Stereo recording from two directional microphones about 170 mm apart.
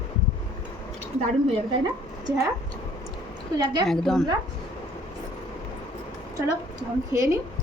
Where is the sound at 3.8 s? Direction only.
Centre (ahead or behind).